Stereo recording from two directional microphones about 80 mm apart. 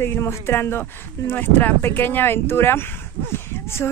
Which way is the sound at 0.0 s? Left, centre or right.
Left.